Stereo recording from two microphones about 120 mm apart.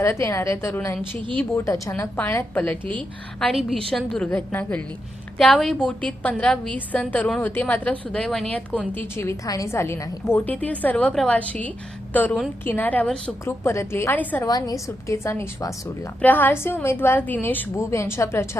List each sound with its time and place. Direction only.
0.0 s a woman's voice: 25° left (ahead or behind)
3.4 s a woman's voice: centre (ahead or behind)
9.0 s a woman's voice: 20° left (ahead or behind)
14.4 s a woman's voice: 30° left (ahead or behind)